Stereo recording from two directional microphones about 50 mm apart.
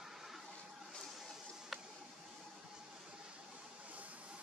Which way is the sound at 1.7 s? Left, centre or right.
Centre.